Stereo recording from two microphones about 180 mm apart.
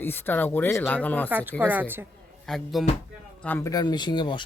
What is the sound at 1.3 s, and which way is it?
Speech, 10° right (ahead or behind).